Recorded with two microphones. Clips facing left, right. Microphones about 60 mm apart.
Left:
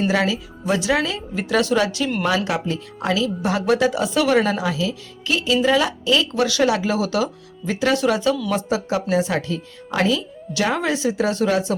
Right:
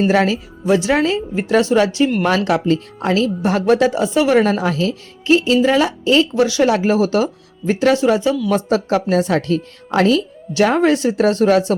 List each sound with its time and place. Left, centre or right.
0.1 s speech: right
2.2 s speech: right
3.0 s speech: right
4.4 s speech: right
5.2 s speech: right
6.7 s speech: right
7.9 s speech: right
8.7 s speech: right
10.5 s speech: right